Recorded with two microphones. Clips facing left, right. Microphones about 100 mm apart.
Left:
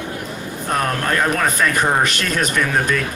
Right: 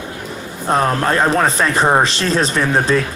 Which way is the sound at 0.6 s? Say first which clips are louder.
Right 5 dB; 25° right (ahead or behind).